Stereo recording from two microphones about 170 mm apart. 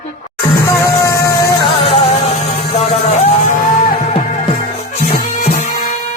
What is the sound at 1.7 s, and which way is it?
Music, 35° left (ahead or behind).